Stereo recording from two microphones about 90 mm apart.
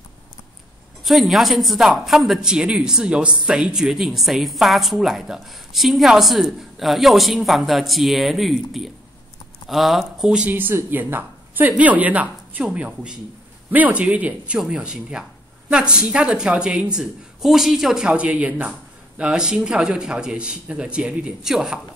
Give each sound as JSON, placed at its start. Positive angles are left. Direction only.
{"t": 1.0, "sound": "speech", "side_deg": 0}
{"t": 10.5, "sound": "a woman's voice", "side_deg": -25}